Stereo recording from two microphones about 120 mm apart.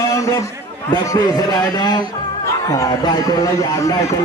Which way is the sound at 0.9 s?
30° left (ahead or behind).